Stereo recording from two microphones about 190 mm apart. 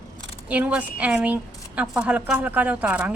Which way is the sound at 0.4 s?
5° right (ahead or behind).